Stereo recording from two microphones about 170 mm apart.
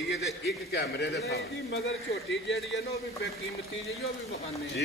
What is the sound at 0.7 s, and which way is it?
A man's voice, 85° left.